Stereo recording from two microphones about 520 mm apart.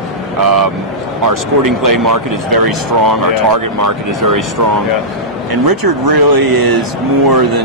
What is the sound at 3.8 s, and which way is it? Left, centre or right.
Speech, right.